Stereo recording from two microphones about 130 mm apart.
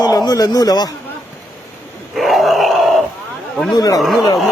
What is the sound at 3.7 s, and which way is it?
Speech, 30° left (ahead or behind).